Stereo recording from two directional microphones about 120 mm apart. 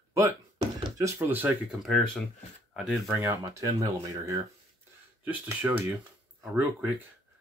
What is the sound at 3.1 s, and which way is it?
Speech, 25° right (ahead or behind).